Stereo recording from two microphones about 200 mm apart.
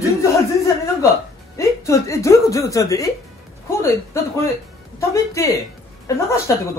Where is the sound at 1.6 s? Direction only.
15° left (ahead or behind).